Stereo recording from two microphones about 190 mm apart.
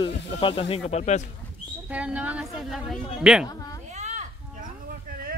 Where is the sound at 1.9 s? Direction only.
5° right (ahead or behind).